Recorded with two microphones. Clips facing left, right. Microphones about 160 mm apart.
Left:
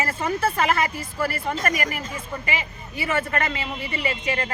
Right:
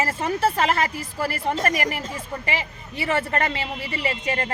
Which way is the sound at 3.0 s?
35° right (ahead or behind).